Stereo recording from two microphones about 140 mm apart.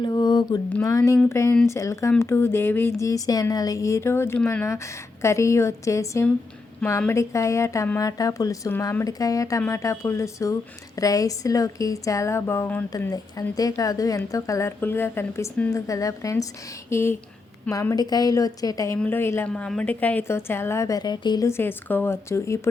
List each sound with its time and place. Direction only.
0.0 s a sound: 30° left (ahead or behind)
0.7 s speech: 20° left (ahead or behind)
13.1 s speech: 25° left (ahead or behind)
18.9 s a woman's voice: 15° left (ahead or behind); by 21.4 s 30° left (ahead or behind)
21.4 s a woman's voice: 15° left (ahead or behind)